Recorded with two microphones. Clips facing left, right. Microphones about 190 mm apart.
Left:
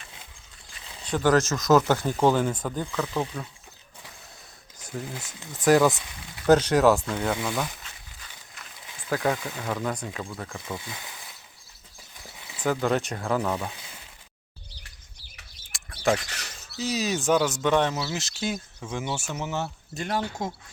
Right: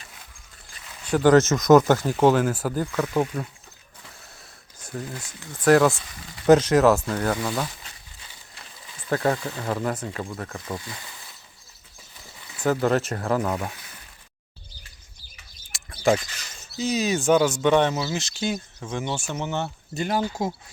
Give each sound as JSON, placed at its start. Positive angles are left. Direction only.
{"t": 1.0, "sound": "speech", "side_deg": -10}
{"t": 1.5, "sound": "speech", "side_deg": -20}
{"t": 2.0, "sound": "speech", "side_deg": -5}
{"t": 4.8, "sound": "speech", "side_deg": 20}
{"t": 5.6, "sound": "speech", "side_deg": 0}
{"t": 9.0, "sound": "speech", "side_deg": 0}
{"t": 12.4, "sound": "a sound", "side_deg": 15}
{"t": 12.6, "sound": "speech", "side_deg": 0}
{"t": 14.7, "sound": "bird", "side_deg": 70}
{"t": 16.1, "sound": "speech", "side_deg": 70}
{"t": 16.6, "sound": "speech", "side_deg": 0}